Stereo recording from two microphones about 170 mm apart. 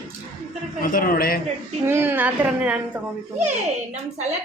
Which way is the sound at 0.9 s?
55° left (ahead or behind).